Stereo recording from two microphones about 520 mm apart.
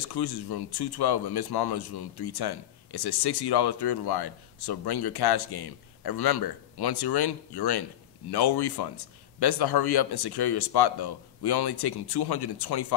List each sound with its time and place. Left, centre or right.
0.0 s speech: left